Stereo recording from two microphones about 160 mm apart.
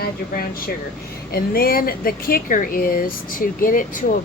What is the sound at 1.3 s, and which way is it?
Speech, 70° left (ahead or behind).